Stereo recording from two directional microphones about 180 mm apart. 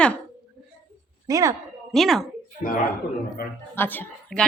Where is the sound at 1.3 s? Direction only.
20° right (ahead or behind).